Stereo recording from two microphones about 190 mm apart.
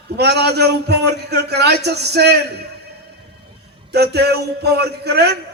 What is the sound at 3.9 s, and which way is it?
A man's voice, 60° right (ahead or behind).